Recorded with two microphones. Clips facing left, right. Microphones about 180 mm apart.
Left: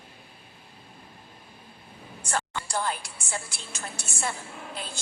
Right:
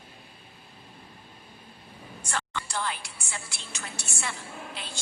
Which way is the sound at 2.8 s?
45° left (ahead or behind).